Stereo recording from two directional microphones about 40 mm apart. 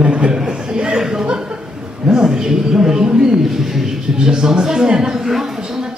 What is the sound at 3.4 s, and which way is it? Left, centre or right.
Speech, centre.